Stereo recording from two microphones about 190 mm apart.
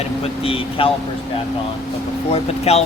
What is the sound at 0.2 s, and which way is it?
Speech, 30° left (ahead or behind).